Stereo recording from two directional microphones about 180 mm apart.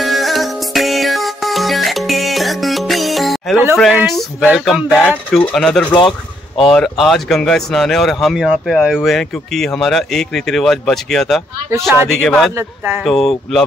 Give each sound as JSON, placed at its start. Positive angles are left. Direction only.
{"t": 0.0, "sound": "music", "side_deg": 0}
{"t": 3.7, "sound": "speech", "side_deg": 0}
{"t": 5.9, "sound": "a sound", "side_deg": 25}
{"t": 6.6, "sound": "speech", "side_deg": 0}
{"t": 12.5, "sound": "speech", "side_deg": -10}
{"t": 13.0, "sound": "speech", "side_deg": 0}